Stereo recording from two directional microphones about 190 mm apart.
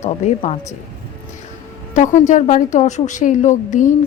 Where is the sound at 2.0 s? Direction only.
40° left (ahead or behind).